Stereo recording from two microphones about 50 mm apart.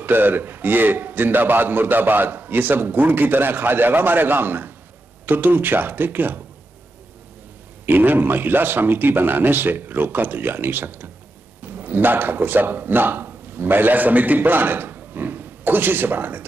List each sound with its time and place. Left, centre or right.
0.0 s a man's voice: right
7.8 s speech: right